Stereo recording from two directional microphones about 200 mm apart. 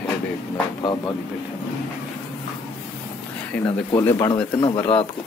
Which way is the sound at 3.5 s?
10° left (ahead or behind).